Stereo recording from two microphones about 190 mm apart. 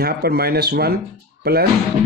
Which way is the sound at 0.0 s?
55° right (ahead or behind).